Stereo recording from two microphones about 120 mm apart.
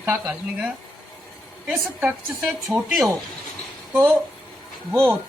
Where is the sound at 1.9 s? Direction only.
15° right (ahead or behind).